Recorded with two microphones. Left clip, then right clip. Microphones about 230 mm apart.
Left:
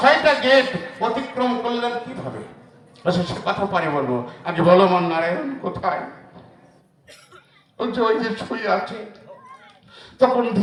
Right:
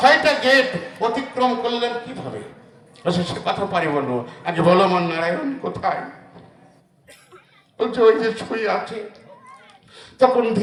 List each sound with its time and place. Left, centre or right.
0.0 s a man's voice: right
7.8 s a man's voice: right
9.9 s a sound: right